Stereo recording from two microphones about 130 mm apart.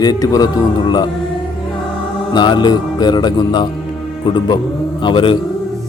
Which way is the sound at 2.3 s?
35° left (ahead or behind).